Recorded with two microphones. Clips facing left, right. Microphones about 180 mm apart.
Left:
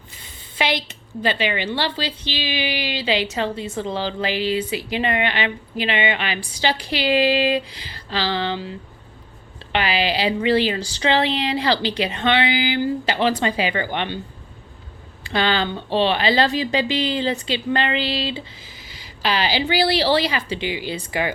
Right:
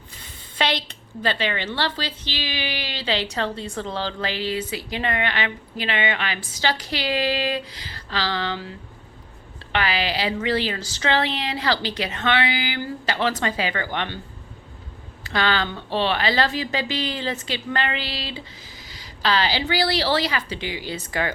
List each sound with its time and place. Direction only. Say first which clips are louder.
1.2 s a woman's voice: left 3 dB; 15° left (ahead or behind)
9.7 s a woman's voice: left 3 dB; 15° left (ahead or behind)
15.3 s a woman's voice: left 2 dB; 20° left (ahead or behind)